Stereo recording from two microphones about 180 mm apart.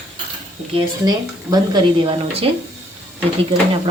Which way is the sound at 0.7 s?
20° right (ahead or behind).